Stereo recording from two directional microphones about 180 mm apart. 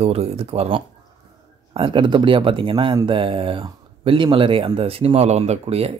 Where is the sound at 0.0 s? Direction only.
35° right (ahead or behind).